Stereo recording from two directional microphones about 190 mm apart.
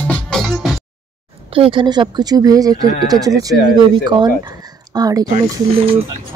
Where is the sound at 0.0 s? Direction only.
5° left (ahead or behind).